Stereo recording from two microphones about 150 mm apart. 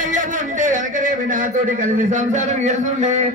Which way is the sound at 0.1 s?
60° right (ahead or behind).